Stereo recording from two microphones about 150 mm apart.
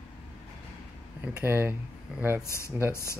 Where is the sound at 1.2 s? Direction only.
10° right (ahead or behind).